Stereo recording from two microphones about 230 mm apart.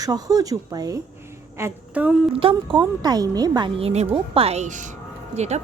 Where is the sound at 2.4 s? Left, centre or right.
Right.